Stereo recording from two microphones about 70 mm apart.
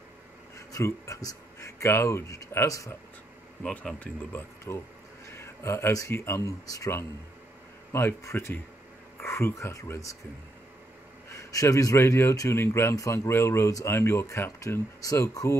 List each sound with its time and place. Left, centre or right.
0.6 s speech: left
3.6 s speech: centre
5.2 s a sound: left
5.9 s speech: left
7.9 s speech: left
11.3 s speech: left
12.9 s speech: left
15.0 s speech: left